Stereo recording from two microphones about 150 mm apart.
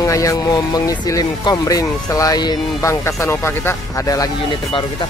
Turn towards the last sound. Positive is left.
turn(degrees=20)  # may be behind; listen again after turning